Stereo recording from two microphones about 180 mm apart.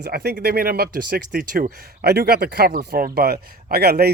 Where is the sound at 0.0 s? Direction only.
60° right (ahead or behind).